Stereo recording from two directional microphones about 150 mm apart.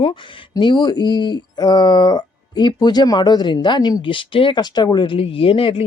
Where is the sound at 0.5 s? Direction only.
30° left (ahead or behind).